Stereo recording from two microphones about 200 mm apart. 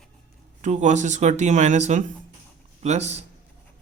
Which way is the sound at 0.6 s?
40° right (ahead or behind).